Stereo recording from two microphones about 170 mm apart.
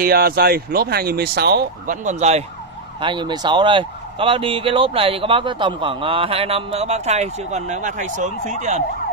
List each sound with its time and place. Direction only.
0.0 s speech: 65° right (ahead or behind)
1.9 s speech: 45° right (ahead or behind)
3.0 s speech: 30° right (ahead or behind); by 8.8 s 45° right (ahead or behind)